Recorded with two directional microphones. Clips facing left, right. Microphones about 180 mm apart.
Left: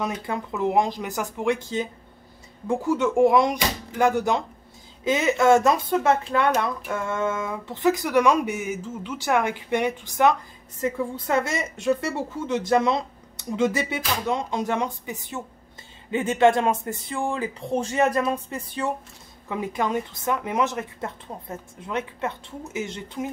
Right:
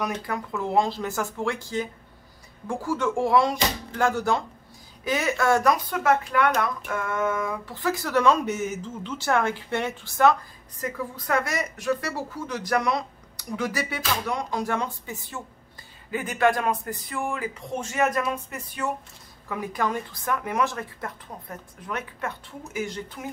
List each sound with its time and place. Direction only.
0.0 s speech: 20° left (ahead or behind)